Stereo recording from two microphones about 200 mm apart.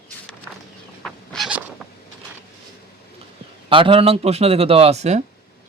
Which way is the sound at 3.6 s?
25° right (ahead or behind).